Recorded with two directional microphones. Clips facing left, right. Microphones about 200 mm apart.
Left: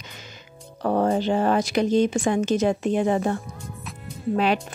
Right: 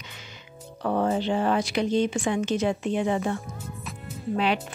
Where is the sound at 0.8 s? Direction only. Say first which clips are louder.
Left 3 dB; 45° left (ahead or behind).